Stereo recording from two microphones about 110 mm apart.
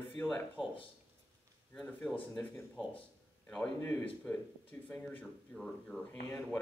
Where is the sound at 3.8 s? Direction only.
15° left (ahead or behind).